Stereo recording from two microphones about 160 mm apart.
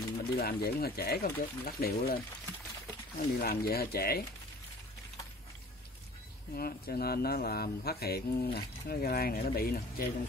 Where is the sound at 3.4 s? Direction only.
75° left (ahead or behind).